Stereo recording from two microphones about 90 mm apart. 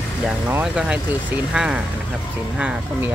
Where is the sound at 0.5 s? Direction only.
15° right (ahead or behind).